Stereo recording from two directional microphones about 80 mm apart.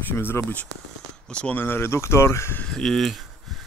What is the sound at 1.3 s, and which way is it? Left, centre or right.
Speech, centre.